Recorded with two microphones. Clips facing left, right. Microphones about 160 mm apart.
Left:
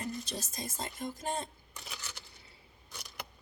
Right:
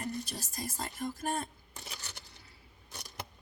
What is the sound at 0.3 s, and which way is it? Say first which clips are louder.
Speech: even; 20° left (ahead or behind).